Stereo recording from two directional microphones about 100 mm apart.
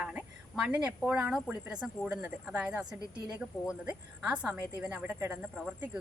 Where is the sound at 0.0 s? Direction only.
10° right (ahead or behind).